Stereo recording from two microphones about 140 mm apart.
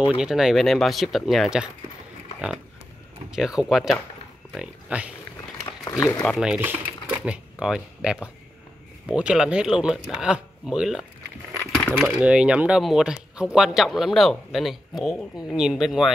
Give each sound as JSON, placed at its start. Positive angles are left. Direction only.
{"t": 0.2, "sound": "speech", "side_deg": -5}
{"t": 3.3, "sound": "speech", "side_deg": -5}
{"t": 5.9, "sound": "speech", "side_deg": 20}
{"t": 6.2, "sound": "speech", "side_deg": 0}
{"t": 11.7, "sound": "coin", "side_deg": 0}
{"t": 12.2, "sound": "speech", "side_deg": -5}